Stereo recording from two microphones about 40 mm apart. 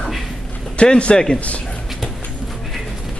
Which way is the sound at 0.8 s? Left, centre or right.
Left.